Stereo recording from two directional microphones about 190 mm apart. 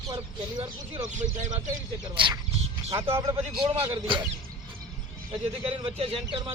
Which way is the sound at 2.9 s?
15° right (ahead or behind).